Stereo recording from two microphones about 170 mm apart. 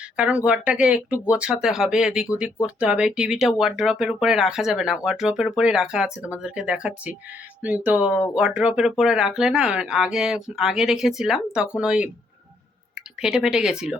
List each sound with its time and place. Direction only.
0.2 s speech: 5° right (ahead or behind)
13.2 s speech: 5° right (ahead or behind)